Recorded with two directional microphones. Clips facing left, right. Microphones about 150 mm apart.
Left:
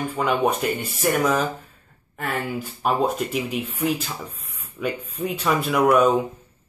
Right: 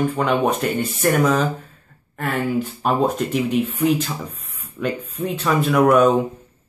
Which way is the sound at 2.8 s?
10° left (ahead or behind).